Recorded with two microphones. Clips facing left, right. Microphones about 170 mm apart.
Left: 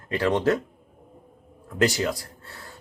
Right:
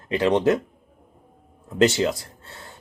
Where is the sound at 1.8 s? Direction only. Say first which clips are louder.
Right 4 dB; 25° right (ahead or behind).